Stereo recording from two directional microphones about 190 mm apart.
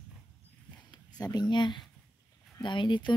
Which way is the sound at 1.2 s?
20° left (ahead or behind).